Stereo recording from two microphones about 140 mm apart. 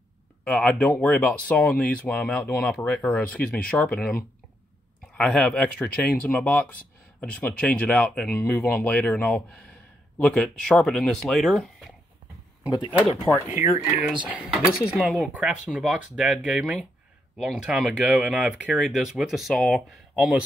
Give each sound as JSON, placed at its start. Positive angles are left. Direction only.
{"t": 0.4, "sound": "speech", "side_deg": 10}
{"t": 13.3, "sound": "speech", "side_deg": 15}
{"t": 14.0, "sound": "speech", "side_deg": -5}